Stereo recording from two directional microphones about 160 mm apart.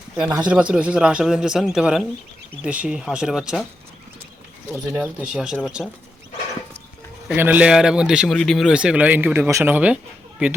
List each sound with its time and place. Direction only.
0.4 s a man's voice: 5° right (ahead or behind)
4.9 s a man's voice: 5° right (ahead or behind)
7.3 s a man's voice: 10° right (ahead or behind)